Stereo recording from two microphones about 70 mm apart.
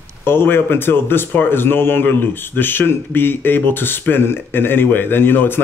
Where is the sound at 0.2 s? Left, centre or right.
Left.